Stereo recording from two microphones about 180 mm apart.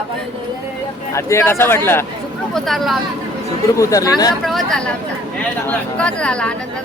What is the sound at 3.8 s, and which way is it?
Speech, 20° left (ahead or behind).